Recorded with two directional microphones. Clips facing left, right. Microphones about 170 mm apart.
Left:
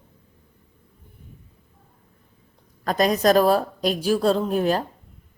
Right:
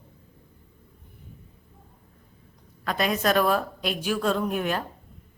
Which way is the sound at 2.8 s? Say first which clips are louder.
Left 6 dB; 40° left (ahead or behind).